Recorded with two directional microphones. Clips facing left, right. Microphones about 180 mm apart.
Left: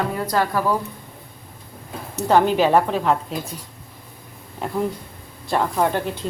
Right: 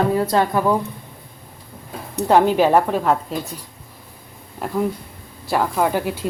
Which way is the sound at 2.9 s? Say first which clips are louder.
Right 1 dB; centre (ahead or behind).